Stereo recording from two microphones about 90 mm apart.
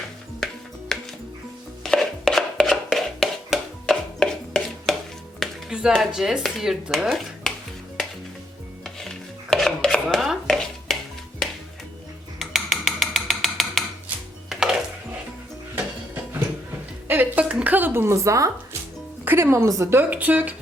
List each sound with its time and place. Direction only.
0.3 s music: 5° left (ahead or behind)
1.8 s chopping: 5° left (ahead or behind)
5.4 s music: 5° right (ahead or behind)
6.0 s speech: 5° right (ahead or behind)
8.8 s chopping: 5° left (ahead or behind)
10.4 s a sound: 5° left (ahead or behind)
12.4 s a sound: centre (ahead or behind)
14.5 s music: 5° right (ahead or behind)
17.1 s music: 20° right (ahead or behind); by 18.8 s 35° right (ahead or behind)
19.2 s speech: 25° right (ahead or behind)
19.9 s speech: 20° right (ahead or behind)